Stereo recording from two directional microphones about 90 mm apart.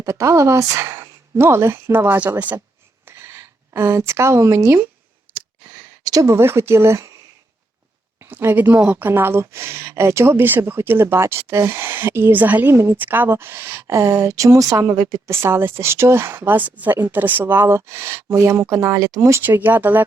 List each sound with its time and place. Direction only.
0.0 s speech: 35° right (ahead or behind); by 2.6 s 15° right (ahead or behind)
3.1 s speech: 25° right (ahead or behind)
6.1 s speech: 35° right (ahead or behind)
8.2 s speech: 25° right (ahead or behind)
19.4 s speech: 20° right (ahead or behind)